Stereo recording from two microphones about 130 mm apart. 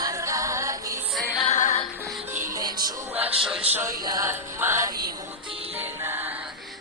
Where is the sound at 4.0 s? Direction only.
30° right (ahead or behind).